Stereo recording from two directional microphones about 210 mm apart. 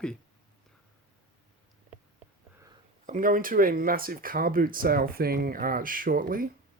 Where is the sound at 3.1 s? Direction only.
40° right (ahead or behind).